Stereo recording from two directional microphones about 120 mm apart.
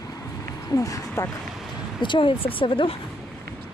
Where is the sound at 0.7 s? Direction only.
30° left (ahead or behind).